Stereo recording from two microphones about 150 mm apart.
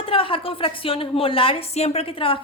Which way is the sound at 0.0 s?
35° left (ahead or behind).